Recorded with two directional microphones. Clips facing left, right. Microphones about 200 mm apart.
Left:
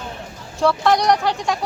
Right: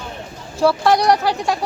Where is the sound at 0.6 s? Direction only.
5° right (ahead or behind).